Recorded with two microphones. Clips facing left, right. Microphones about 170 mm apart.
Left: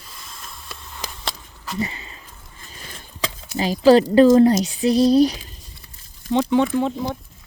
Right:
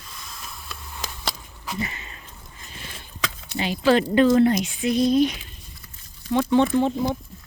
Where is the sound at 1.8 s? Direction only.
30° left (ahead or behind).